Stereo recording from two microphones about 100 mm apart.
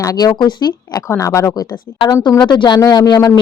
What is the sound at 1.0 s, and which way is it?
Speech, 30° left (ahead or behind).